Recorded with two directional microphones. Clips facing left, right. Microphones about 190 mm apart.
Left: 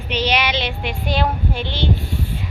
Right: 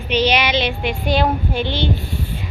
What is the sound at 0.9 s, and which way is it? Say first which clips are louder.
Speech: right 3 dB; 10° right (ahead or behind).